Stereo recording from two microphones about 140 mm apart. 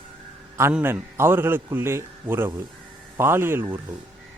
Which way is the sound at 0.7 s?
15° right (ahead or behind).